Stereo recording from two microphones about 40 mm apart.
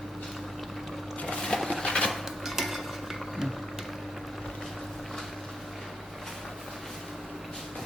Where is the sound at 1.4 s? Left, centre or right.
Centre.